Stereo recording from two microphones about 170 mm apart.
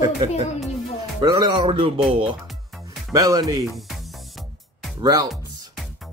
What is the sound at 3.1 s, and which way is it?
Speech, 20° right (ahead or behind).